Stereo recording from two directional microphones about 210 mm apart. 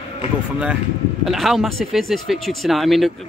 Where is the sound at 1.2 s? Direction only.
Centre (ahead or behind).